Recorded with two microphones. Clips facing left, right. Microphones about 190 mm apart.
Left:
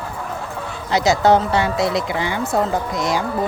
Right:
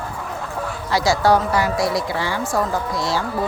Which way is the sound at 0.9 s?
20° left (ahead or behind).